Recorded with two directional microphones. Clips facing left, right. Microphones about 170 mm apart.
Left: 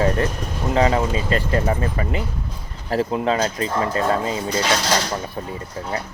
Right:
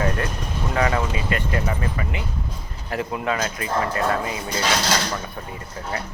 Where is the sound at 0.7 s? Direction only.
25° left (ahead or behind).